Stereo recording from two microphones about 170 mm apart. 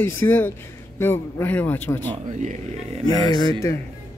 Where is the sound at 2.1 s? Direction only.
45° right (ahead or behind).